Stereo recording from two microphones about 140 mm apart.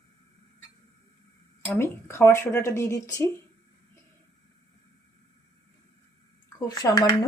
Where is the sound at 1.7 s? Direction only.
20° left (ahead or behind).